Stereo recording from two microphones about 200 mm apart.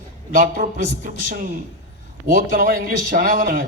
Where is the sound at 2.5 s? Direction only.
45° right (ahead or behind).